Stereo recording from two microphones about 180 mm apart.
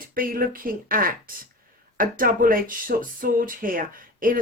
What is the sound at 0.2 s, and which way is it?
Speech, 50° right (ahead or behind).